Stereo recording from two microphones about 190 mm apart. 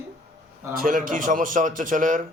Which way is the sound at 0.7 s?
45° right (ahead or behind).